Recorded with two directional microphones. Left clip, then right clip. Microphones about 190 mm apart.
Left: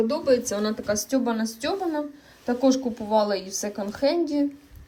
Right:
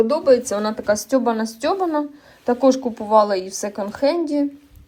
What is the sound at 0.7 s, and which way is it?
Speech, 5° right (ahead or behind).